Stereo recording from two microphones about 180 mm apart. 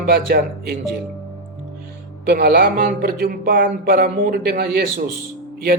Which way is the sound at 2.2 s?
60° right (ahead or behind).